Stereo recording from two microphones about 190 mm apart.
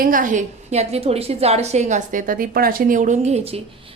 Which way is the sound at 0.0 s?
45° right (ahead or behind).